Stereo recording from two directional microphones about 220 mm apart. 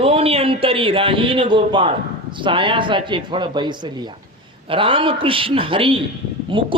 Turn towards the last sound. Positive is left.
turn(degrees=-25)  # may be behind; listen again after turning